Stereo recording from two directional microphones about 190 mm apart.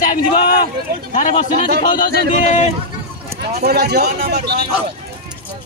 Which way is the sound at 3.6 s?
55° right (ahead or behind).